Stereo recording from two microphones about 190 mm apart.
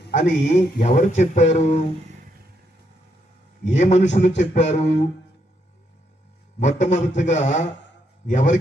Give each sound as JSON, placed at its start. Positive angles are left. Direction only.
{"t": 0.1, "sound": "speech", "side_deg": 40}
{"t": 3.7, "sound": "speech", "side_deg": 35}
{"t": 6.6, "sound": "speech", "side_deg": 40}